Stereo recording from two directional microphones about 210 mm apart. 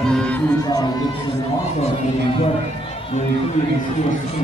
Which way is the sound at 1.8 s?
30° left (ahead or behind).